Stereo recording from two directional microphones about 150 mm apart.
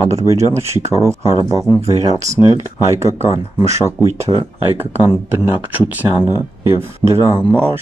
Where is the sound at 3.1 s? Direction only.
15° right (ahead or behind).